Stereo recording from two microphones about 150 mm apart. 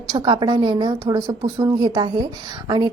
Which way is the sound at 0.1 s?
30° right (ahead or behind).